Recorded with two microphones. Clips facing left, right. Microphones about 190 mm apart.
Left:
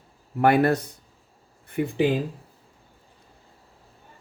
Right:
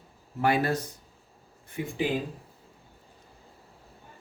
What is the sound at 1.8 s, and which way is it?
Speech, 55° left (ahead or behind).